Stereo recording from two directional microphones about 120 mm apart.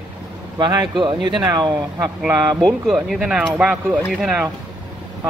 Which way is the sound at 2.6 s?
Centre (ahead or behind).